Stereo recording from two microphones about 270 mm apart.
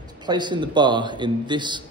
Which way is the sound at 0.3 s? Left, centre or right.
Centre.